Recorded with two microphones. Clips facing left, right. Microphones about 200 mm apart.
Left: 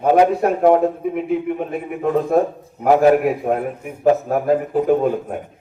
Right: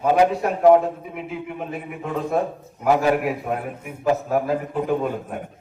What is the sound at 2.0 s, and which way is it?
A man's voice, 40° left (ahead or behind).